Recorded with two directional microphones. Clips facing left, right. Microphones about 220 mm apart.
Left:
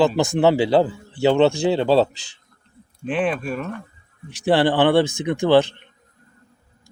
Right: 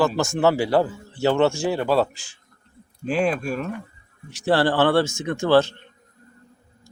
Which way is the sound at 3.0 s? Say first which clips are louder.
Even; centre (ahead or behind).